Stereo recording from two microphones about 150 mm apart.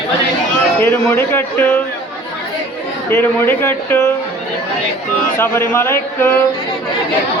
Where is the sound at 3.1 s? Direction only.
15° left (ahead or behind).